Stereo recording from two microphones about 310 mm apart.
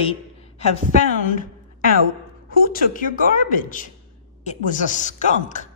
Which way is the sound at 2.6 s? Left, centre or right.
Left.